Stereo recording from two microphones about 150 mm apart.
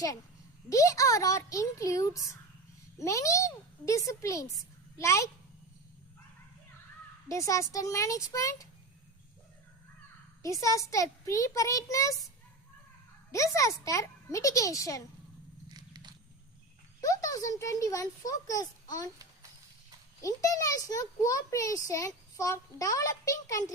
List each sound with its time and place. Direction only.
0.7 s a child's voice: 20° left (ahead or behind)
7.3 s a child's voice: 20° left (ahead or behind)
10.4 s a child's voice: 20° left (ahead or behind)
13.3 s a child's voice: 20° left (ahead or behind)
15.7 s biting: 25° right (ahead or behind)
17.0 s a child's voice: 25° left (ahead or behind)
20.2 s a child's voice: 25° left (ahead or behind)